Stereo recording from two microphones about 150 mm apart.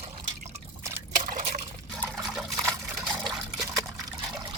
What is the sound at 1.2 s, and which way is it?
Liquid, 60° right (ahead or behind).